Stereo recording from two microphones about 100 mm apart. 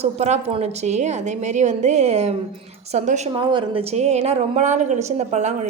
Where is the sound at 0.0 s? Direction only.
90° right.